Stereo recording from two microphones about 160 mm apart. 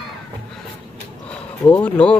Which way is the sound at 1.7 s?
5° left (ahead or behind).